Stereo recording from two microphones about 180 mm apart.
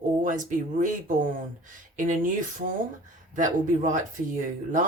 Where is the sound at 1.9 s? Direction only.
45° right (ahead or behind).